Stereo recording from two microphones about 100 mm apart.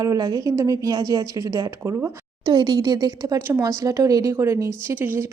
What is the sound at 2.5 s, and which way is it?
A woman's voice, 45° right (ahead or behind).